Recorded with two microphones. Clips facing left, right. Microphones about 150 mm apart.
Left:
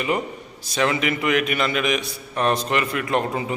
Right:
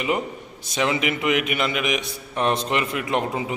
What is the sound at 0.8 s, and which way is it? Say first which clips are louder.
A man's voice: left 1 dB; 15° right (ahead or behind).